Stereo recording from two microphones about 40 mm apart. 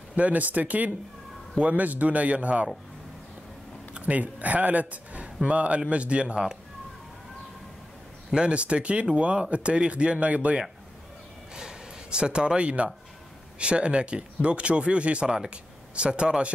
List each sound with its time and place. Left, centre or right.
0.1 s a man's voice: right
4.0 s speech: right
8.4 s a man's voice: right
11.5 s speech: right
15.2 s speech: centre
15.5 s speech: right